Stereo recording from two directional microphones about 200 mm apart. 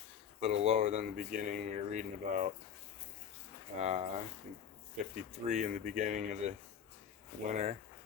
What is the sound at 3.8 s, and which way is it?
Speech, 35° right (ahead or behind).